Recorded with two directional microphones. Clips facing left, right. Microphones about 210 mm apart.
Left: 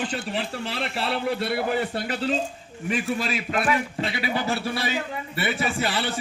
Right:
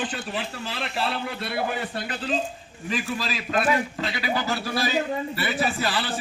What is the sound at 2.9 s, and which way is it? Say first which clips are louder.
A man's voice: left 3 dB; 25° left (ahead or behind).